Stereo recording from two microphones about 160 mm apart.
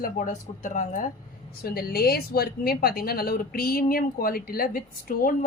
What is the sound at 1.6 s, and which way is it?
Speech, 70° left (ahead or behind).